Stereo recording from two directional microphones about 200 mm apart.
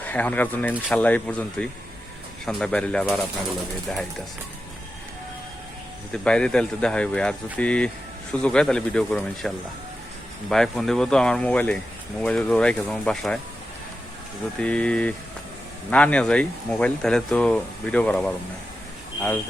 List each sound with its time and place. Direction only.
0.0 s speech: 10° left (ahead or behind)
6.2 s speech: 5° left (ahead or behind)
10.5 s speech: centre (ahead or behind)
14.6 s speech: 5° left (ahead or behind)